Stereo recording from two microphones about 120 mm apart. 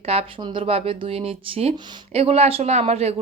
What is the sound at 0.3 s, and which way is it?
A woman's voice, 45° right (ahead or behind).